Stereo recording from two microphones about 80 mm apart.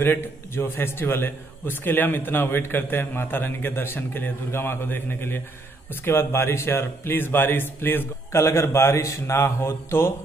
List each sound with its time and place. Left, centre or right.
0.0 s a man's voice: left